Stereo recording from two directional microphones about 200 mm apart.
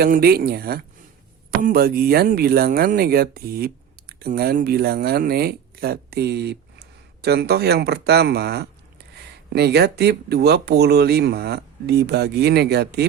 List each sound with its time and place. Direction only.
0.0 s speech: 50° right (ahead or behind)